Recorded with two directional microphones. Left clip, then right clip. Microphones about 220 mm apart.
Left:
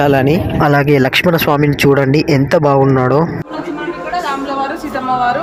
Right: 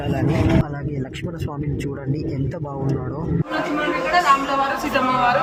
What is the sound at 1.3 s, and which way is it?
Speech, 35° left (ahead or behind).